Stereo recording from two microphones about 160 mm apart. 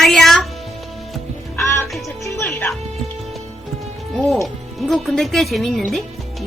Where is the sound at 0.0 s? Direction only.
Centre (ahead or behind).